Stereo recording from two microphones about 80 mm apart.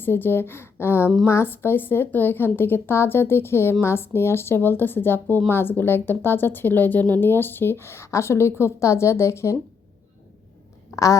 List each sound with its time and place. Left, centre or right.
0.0 s a woman's voice: left
10.9 s a woman's voice: left